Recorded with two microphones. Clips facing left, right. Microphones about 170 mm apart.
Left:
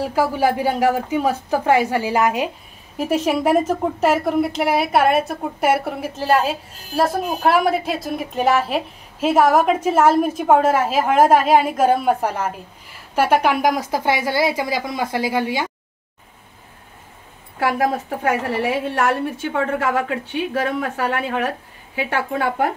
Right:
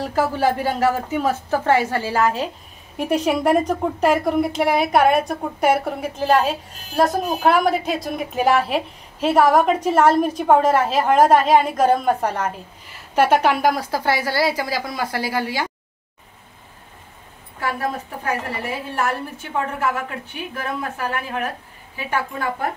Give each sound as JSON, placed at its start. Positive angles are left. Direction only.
{"t": 0.0, "sound": "a woman's voice", "side_deg": 10}
{"t": 3.0, "sound": "a woman's voice", "side_deg": 5}
{"t": 17.6, "sound": "a woman's voice", "side_deg": 80}